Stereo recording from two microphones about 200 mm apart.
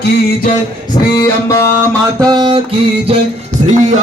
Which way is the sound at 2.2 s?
20° right (ahead or behind).